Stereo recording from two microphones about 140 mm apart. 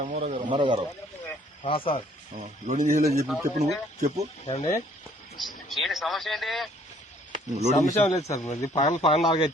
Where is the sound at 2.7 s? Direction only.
75° right (ahead or behind); by 3.2 s 90° right.